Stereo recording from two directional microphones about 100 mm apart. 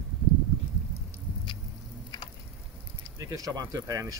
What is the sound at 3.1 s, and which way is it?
Speech, 35° right (ahead or behind).